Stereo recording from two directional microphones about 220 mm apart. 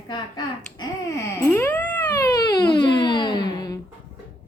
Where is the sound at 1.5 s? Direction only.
10° left (ahead or behind).